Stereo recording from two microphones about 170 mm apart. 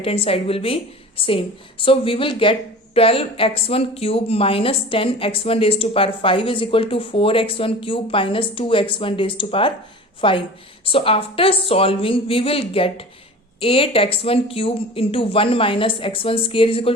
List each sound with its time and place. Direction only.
0.0 s a woman's voice: 35° left (ahead or behind)